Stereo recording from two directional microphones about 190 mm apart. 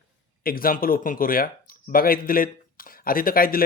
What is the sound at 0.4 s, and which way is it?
Speech, 50° left (ahead or behind).